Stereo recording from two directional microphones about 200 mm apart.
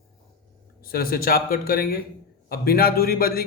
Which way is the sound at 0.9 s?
45° left (ahead or behind).